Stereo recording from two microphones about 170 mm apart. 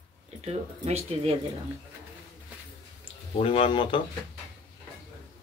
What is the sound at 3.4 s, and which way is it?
Speech, 35° left (ahead or behind).